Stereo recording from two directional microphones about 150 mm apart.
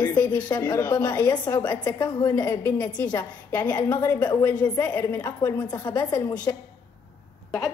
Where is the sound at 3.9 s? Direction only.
25° left (ahead or behind).